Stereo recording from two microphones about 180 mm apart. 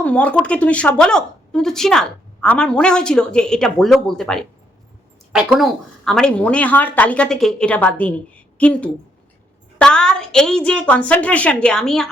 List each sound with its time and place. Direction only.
0.0 s a woman's voice: 5° left (ahead or behind)